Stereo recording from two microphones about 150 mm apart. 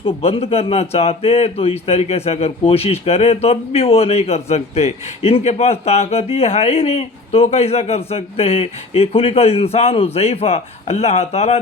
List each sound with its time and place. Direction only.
0.0 s a man's voice: 40° left (ahead or behind)